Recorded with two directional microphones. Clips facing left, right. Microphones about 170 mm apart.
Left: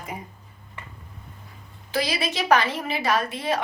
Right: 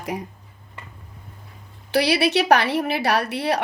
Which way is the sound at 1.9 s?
70° right (ahead or behind).